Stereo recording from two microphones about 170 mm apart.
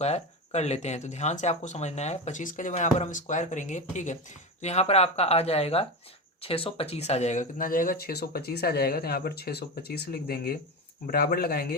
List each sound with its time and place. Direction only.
0.0 s speech: 40° left (ahead or behind); by 11.8 s 65° left (ahead or behind)